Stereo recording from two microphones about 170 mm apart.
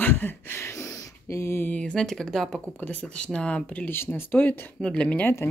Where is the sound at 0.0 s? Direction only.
10° left (ahead or behind).